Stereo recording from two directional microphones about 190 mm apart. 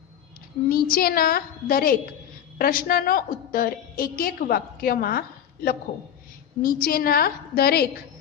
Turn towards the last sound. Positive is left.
turn(degrees=55)  # may be behind; listen again after turning